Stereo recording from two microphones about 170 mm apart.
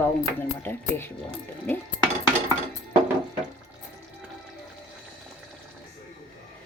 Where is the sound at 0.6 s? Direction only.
10° left (ahead or behind).